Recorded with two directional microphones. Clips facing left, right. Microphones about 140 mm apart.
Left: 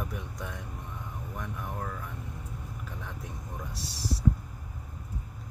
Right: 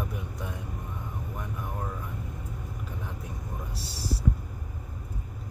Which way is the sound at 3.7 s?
30° right (ahead or behind).